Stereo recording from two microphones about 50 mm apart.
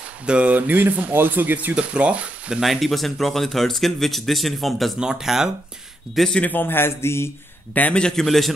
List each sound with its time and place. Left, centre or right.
0.3 s speech: right
1.8 s speech: right
2.6 s speech: centre
5.0 s speech: centre
6.4 s a man's voice: left
7.9 s a man's voice: centre